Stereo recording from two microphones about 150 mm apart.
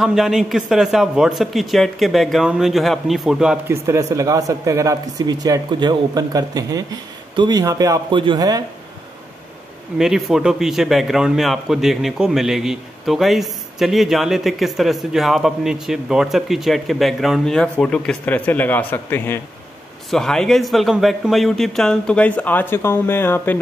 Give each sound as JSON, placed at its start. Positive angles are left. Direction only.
{"t": 0.0, "sound": "a man's voice", "side_deg": 0}
{"t": 3.7, "sound": "speech", "side_deg": -20}
{"t": 9.9, "sound": "a man's voice", "side_deg": -5}